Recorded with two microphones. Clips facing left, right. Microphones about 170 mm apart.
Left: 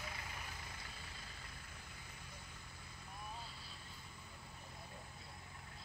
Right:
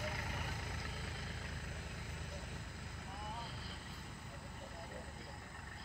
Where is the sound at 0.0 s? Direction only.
50° right (ahead or behind); by 2.6 s 70° right (ahead or behind).